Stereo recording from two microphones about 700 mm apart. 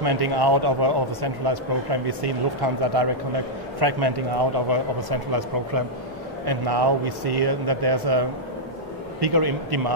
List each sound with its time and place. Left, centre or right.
0.0 s speech: right